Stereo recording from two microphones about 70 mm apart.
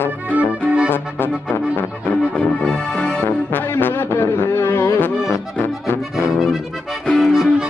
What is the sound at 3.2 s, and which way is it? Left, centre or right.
Music, left.